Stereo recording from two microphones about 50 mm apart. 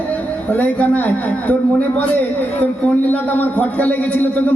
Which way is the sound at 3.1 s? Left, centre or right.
Left.